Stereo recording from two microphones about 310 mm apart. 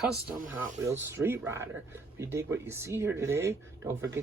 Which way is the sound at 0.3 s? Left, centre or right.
Centre.